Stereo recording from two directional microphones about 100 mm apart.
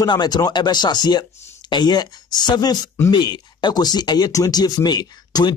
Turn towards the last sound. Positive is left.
turn(degrees=45)  # may be behind; listen again after turning